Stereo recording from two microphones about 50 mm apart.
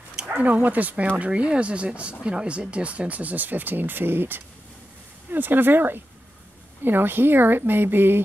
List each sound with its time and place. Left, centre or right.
0.4 s speech: right